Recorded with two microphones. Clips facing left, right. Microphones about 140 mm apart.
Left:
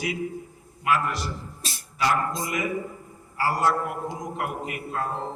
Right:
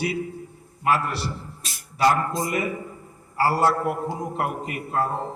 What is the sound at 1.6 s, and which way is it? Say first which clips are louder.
Beatboxing: left 3 dB; 30° left (ahead or behind).